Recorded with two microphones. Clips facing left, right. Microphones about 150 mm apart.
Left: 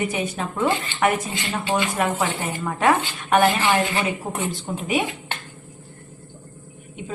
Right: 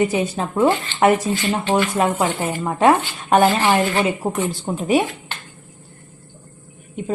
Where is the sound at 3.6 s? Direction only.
40° right (ahead or behind).